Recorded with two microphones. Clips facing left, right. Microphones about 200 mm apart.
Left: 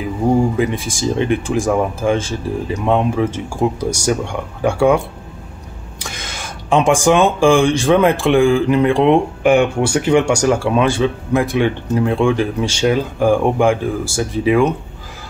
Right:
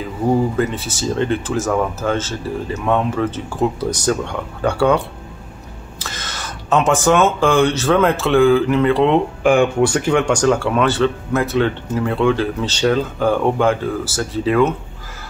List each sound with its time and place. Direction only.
0.6 s speech: 15° left (ahead or behind)
5.9 s a sound: 15° left (ahead or behind)
7.3 s speech: 10° left (ahead or behind)